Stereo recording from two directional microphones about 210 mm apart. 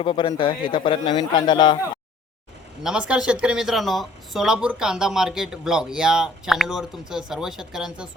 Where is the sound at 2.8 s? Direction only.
5° right (ahead or behind).